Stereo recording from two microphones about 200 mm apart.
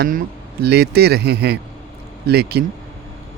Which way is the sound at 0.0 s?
45° right (ahead or behind).